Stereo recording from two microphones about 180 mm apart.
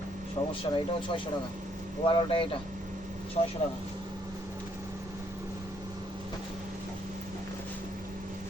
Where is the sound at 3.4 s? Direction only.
40° left (ahead or behind).